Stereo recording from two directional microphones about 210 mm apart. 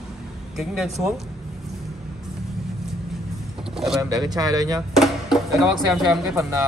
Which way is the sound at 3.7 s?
Centre (ahead or behind).